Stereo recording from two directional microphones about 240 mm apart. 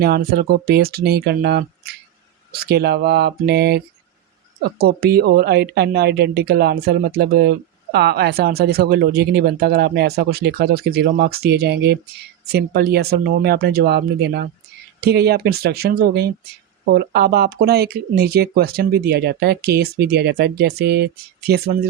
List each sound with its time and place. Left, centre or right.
0.0 s speech: right